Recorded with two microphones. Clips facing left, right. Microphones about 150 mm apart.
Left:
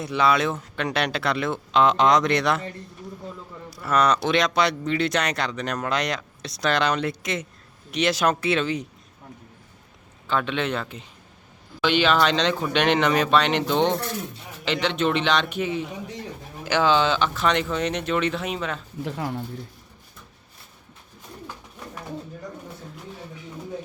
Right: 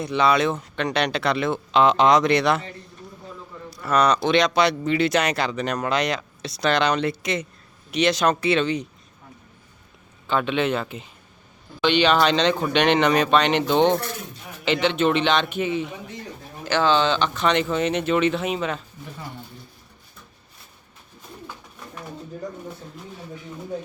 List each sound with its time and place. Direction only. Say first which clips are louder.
0.0 s speech: right 2 dB; centre (ahead or behind)
3.7 s speech: right 1 dB; centre (ahead or behind)
10.2 s speech: right 3 dB; 5° right (ahead or behind)
16.6 s speech: even; 10° left (ahead or behind)
19.0 s speech: left 8 dB; 80° left